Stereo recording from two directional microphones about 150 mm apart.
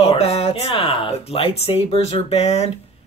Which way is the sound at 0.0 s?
45° left (ahead or behind).